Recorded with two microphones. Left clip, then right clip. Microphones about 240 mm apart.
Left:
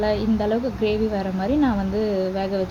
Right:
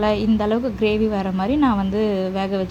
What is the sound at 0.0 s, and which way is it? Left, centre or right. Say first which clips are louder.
Speech: right 2 dB; right.